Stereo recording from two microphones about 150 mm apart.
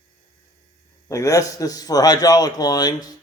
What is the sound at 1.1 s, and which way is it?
A man's voice, 20° left (ahead or behind).